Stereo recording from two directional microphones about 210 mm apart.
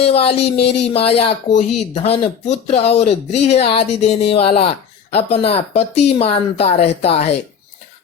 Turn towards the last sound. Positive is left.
turn(degrees=30)  # may be behind; listen again after turning